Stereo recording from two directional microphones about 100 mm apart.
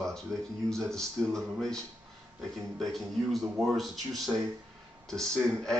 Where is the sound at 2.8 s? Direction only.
Centre (ahead or behind).